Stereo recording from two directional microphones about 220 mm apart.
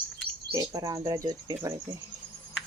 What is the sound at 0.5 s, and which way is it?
Speech, 15° right (ahead or behind).